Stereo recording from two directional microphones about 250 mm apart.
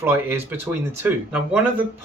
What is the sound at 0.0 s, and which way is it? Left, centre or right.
Speech, centre.